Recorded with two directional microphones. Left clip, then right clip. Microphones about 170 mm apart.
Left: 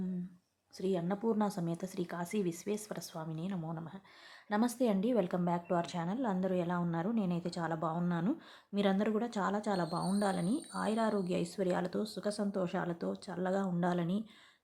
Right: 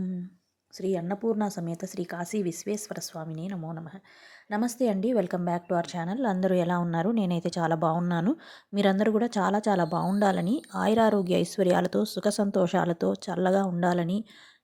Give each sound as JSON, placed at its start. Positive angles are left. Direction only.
{"t": 0.8, "sound": "speech", "side_deg": -25}